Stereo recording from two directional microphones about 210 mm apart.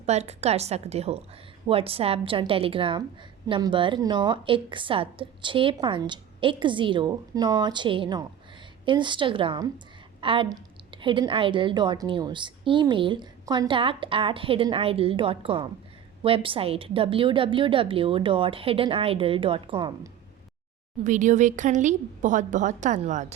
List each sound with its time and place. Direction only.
0.0 s a woman's voice: 30° right (ahead or behind)
21.0 s speech: 35° right (ahead or behind)